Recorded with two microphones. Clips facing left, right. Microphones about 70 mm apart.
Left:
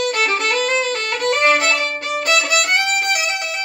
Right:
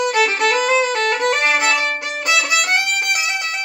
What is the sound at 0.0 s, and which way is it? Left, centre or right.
Violin, centre.